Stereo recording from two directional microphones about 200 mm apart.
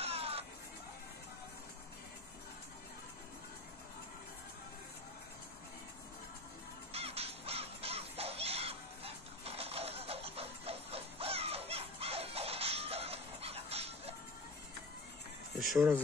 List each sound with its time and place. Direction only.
0.0 s music: 30° right (ahead or behind)
6.9 s crow: 30° right (ahead or behind)
15.6 s speech: centre (ahead or behind)